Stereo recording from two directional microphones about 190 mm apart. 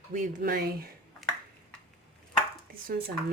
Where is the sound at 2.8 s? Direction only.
50° right (ahead or behind).